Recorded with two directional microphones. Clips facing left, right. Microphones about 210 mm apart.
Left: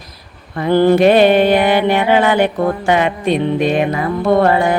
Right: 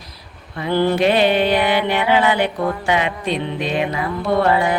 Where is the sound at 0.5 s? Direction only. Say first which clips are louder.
Left 7 dB; 50° left (ahead or behind).